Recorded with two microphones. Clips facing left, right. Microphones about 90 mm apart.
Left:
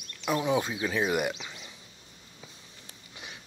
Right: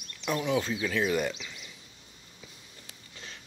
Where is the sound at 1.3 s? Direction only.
30° left (ahead or behind).